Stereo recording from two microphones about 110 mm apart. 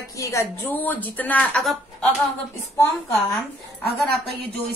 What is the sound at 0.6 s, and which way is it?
Speech, 15° left (ahead or behind).